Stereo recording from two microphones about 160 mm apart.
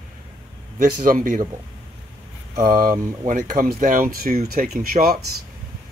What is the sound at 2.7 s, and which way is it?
Speech, 25° right (ahead or behind).